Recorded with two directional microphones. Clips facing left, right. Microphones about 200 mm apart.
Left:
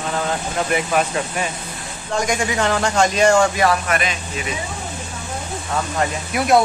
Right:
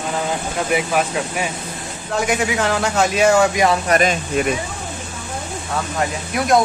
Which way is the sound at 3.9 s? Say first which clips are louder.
Right 6 dB; 45° right (ahead or behind).